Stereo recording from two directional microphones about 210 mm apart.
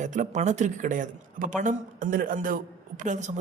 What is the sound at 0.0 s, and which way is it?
A woman's voice, 35° right (ahead or behind).